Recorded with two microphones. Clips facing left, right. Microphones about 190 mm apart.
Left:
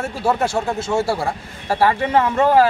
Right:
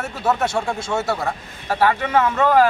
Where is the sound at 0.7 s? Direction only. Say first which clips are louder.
Left 3 dB; 5° left (ahead or behind).